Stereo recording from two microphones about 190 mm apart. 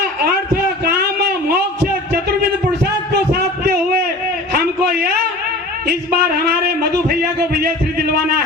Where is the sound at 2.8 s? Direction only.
55° right (ahead or behind).